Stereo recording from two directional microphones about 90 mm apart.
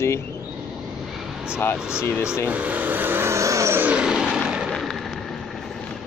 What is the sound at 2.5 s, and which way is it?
Vehicle, 15° right (ahead or behind).